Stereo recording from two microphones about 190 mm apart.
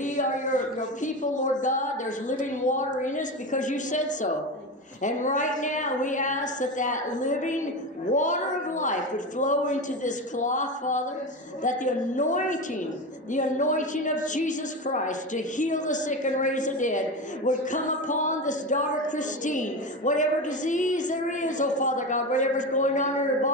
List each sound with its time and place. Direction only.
0.0 s music: 40° left (ahead or behind)